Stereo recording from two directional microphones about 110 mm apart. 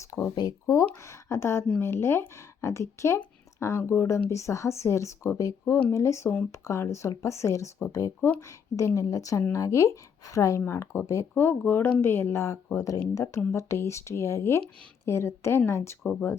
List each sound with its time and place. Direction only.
0.0 s speech: 25° left (ahead or behind)